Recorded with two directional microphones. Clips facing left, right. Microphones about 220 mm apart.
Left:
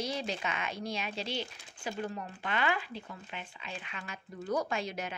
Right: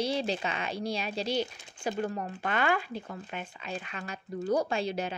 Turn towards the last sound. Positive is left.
turn(degrees=-30)  # may be behind; listen again after turning